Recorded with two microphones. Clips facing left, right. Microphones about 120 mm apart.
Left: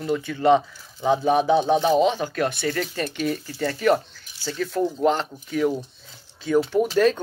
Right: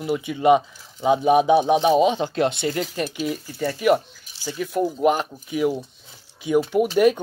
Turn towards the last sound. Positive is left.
turn(degrees=-10)  # may be behind; listen again after turning